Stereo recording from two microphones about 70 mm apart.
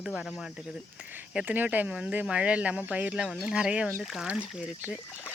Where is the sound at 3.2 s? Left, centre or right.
Centre.